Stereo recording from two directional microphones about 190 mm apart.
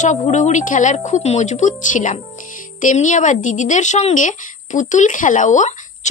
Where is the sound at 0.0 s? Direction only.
40° left (ahead or behind).